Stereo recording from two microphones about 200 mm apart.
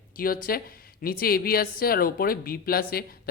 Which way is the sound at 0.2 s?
45° left (ahead or behind).